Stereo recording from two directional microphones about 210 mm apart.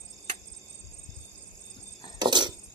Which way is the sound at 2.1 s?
20° right (ahead or behind).